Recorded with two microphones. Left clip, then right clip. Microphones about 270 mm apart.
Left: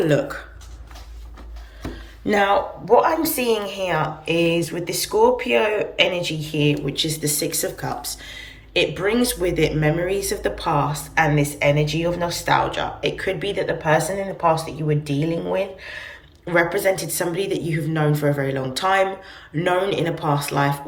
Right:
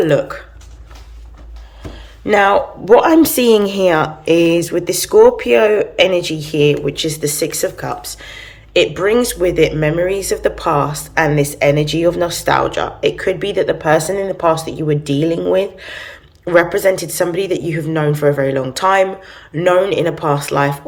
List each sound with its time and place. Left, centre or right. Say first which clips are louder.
0.0 s speech: right 6 dB; centre
2.2 s speech: right 7 dB; centre
3.1 s a woman's voice: right 10 dB; right